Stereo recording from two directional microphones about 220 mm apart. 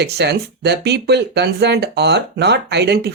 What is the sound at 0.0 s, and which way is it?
Speech, 50° right (ahead or behind).